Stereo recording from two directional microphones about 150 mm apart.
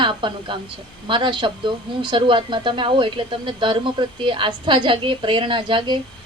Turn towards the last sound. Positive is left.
turn(degrees=-35)  # may be behind; listen again after turning